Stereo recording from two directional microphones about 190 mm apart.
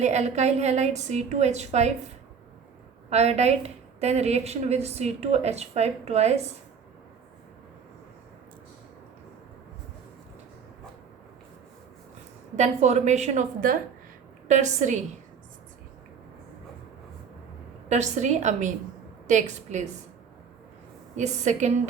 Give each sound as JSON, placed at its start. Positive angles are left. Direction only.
{"t": 0.0, "sound": "a woman's voice", "side_deg": -35}
{"t": 3.1, "sound": "a woman's voice", "side_deg": -35}
{"t": 12.5, "sound": "a woman's voice", "side_deg": -35}
{"t": 17.8, "sound": "a woman's voice", "side_deg": -35}
{"t": 21.2, "sound": "a woman's voice", "side_deg": -40}